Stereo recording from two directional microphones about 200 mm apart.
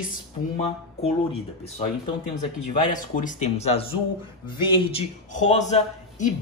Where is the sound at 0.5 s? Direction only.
30° left (ahead or behind).